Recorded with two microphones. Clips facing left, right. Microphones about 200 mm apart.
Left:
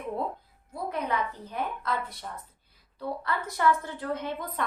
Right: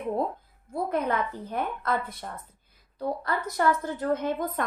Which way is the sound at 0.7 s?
50° right (ahead or behind).